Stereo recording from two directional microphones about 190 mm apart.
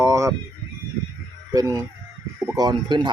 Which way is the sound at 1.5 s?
20° right (ahead or behind).